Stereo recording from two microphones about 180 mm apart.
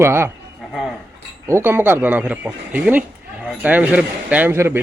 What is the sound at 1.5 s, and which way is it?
Speech, 15° right (ahead or behind).